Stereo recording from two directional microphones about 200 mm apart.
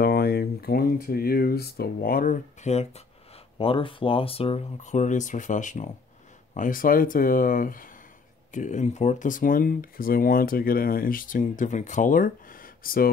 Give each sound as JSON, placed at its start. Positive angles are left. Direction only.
{"t": 0.0, "sound": "speech", "side_deg": 50}